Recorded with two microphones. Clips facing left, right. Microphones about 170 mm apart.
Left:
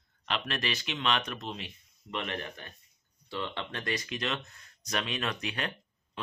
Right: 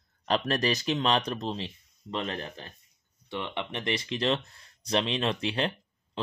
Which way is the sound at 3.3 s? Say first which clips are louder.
Right 2 dB; 20° right (ahead or behind).